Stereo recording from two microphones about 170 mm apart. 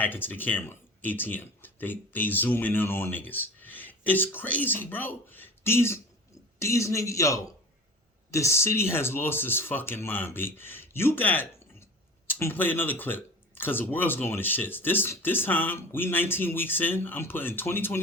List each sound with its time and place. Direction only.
0.0 s speech: 10° left (ahead or behind)